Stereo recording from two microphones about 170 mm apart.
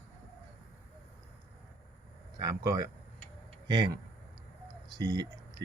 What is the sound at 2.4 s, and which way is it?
Speech, 20° right (ahead or behind).